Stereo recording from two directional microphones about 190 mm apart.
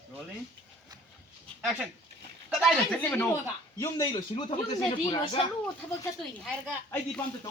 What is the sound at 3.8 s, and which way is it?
Speech, 20° left (ahead or behind).